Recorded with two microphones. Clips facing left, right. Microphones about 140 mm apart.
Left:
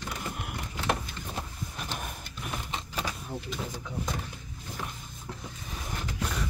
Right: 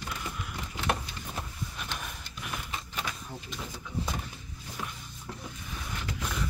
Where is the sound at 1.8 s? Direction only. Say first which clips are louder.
Left 5 dB; 40° left (ahead or behind).